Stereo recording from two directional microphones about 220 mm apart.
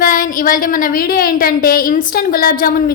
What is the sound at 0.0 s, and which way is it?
A woman's voice, 40° left (ahead or behind).